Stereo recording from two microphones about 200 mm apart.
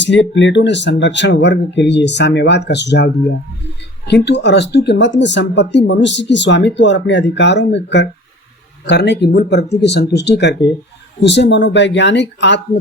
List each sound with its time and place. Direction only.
0.0 s speech: 65° left (ahead or behind)